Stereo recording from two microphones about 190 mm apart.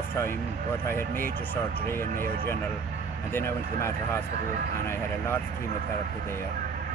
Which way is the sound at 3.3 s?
15° left (ahead or behind).